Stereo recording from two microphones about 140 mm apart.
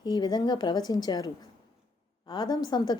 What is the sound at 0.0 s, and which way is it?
A woman's voice, 30° left (ahead or behind).